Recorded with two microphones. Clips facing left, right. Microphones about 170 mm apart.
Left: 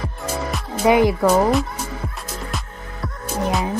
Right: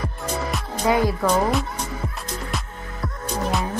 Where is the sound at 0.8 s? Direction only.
15° left (ahead or behind).